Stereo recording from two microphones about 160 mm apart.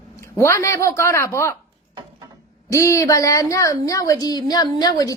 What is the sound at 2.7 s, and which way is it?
A woman's voice, 20° left (ahead or behind).